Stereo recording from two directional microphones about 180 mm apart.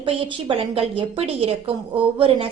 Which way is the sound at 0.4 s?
30° right (ahead or behind).